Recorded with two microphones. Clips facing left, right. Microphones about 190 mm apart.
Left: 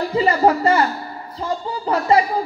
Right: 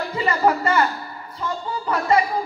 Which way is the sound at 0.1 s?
30° left (ahead or behind).